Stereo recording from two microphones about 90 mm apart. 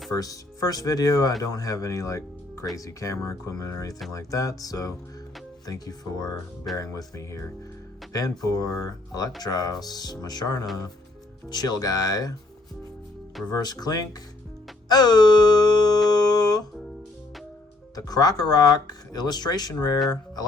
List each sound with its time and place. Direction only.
0.1 s speech: 45° left (ahead or behind)
6.7 s speech: 35° left (ahead or behind)
13.5 s speech: 50° left (ahead or behind)
14.8 s music: 50° left (ahead or behind)
17.9 s speech: 45° left (ahead or behind)